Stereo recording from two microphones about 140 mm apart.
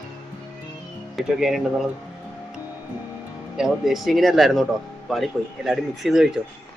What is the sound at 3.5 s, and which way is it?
Speech, centre (ahead or behind).